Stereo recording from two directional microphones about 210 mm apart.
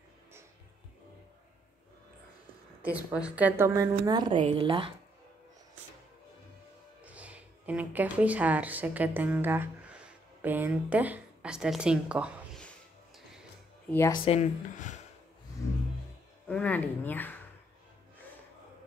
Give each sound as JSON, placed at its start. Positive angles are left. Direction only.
{"t": 2.8, "sound": "a woman's voice", "side_deg": -5}
{"t": 7.1, "sound": "speech", "side_deg": -5}
{"t": 13.8, "sound": "speech", "side_deg": 10}
{"t": 14.2, "sound": "speech", "side_deg": 30}
{"t": 16.4, "sound": "speech", "side_deg": 5}